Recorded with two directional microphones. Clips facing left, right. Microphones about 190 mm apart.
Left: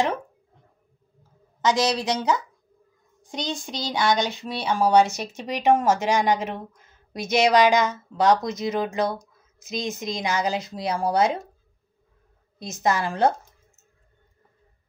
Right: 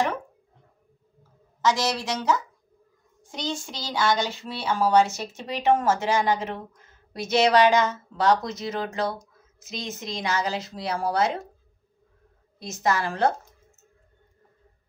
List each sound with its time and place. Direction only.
1.6 s a woman's voice: 20° left (ahead or behind)
12.5 s speech: 20° left (ahead or behind)